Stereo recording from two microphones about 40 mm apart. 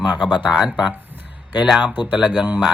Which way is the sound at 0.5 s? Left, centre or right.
Centre.